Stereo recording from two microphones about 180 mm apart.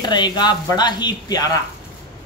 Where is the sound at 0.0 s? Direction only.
25° left (ahead or behind).